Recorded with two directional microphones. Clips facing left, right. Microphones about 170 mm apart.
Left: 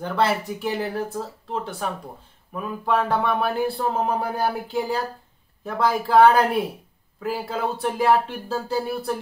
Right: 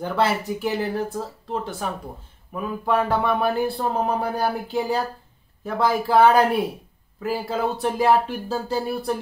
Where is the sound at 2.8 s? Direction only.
Centre (ahead or behind).